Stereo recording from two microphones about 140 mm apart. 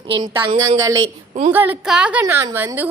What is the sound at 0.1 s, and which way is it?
Speech, 35° right (ahead or behind).